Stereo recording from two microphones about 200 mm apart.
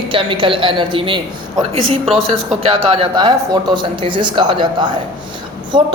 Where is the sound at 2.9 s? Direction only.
25° right (ahead or behind).